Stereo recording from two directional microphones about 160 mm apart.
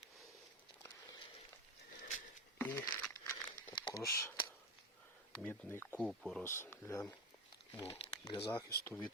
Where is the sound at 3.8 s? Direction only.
20° left (ahead or behind).